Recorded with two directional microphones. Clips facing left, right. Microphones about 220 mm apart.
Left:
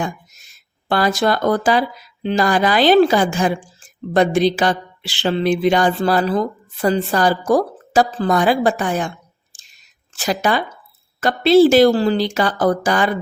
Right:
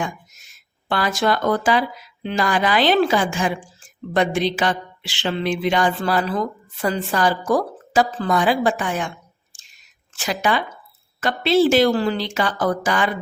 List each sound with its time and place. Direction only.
0.0 s a woman's voice: 35° left (ahead or behind)